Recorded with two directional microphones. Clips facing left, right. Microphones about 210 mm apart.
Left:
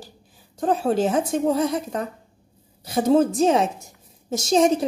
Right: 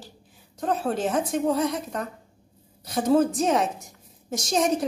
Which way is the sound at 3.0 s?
25° left (ahead or behind).